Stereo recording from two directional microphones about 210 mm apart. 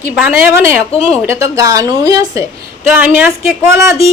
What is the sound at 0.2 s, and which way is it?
A woman's voice, 10° right (ahead or behind).